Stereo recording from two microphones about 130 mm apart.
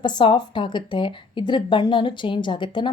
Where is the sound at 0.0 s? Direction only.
35° left (ahead or behind).